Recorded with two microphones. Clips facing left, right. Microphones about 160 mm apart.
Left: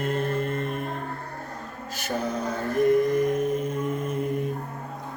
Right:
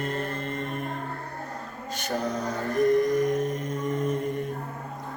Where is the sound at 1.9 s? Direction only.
5° left (ahead or behind).